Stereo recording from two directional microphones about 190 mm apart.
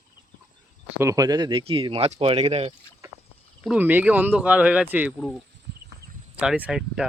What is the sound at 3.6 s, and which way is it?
Speech, 10° right (ahead or behind).